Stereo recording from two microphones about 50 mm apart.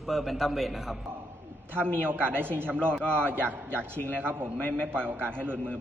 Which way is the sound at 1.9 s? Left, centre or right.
Right.